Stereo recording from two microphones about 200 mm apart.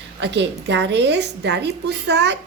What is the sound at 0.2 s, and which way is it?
A woman's voice, 60° right (ahead or behind).